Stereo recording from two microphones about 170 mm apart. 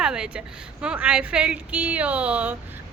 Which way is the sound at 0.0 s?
5° right (ahead or behind).